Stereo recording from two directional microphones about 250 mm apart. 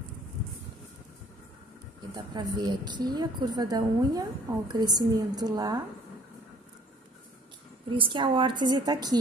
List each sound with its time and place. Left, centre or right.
2.1 s a woman's voice: centre
7.9 s a woman's voice: centre